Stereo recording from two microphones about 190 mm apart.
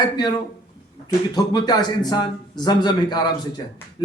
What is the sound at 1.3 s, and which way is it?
Speech, 20° left (ahead or behind).